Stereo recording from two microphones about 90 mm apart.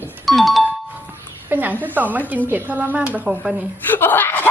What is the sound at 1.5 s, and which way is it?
A woman's voice, 20° right (ahead or behind).